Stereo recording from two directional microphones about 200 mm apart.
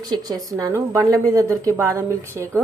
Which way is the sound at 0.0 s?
20° right (ahead or behind).